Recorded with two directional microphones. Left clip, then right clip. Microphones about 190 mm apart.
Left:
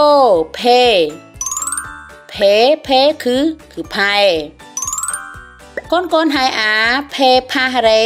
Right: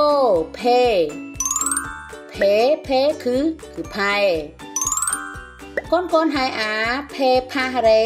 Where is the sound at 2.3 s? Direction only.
25° left (ahead or behind).